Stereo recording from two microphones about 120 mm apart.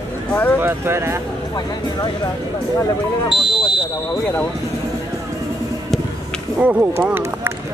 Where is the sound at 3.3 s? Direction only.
5° right (ahead or behind).